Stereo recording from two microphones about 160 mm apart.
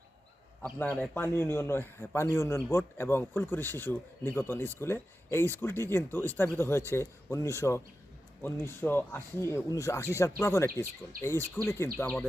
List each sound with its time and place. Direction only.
0.6 s speech: 10° left (ahead or behind)